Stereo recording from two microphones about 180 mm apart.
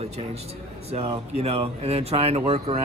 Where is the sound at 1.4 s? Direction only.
35° right (ahead or behind).